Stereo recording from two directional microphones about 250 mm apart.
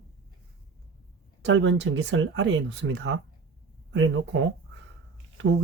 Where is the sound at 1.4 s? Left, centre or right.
Right.